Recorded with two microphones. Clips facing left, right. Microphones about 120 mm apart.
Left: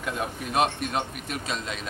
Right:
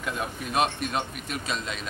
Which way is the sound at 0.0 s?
45° left (ahead or behind).